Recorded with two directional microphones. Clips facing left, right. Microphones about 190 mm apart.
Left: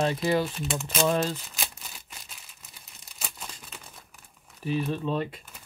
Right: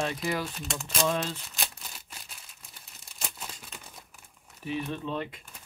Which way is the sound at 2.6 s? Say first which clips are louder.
Even; centre (ahead or behind).